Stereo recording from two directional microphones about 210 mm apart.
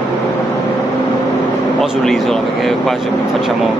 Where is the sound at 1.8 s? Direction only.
Centre (ahead or behind).